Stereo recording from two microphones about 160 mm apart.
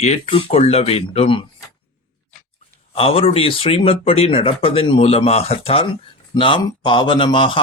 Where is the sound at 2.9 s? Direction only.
35° left (ahead or behind).